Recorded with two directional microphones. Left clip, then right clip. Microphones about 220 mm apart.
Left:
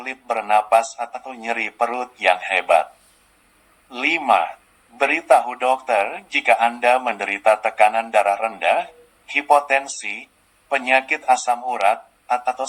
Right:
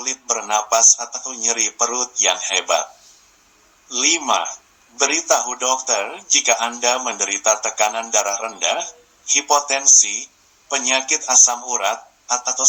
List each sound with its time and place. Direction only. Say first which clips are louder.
0.0 s speech: even; 20° right (ahead or behind)
3.8 s speech: even; 20° right (ahead or behind)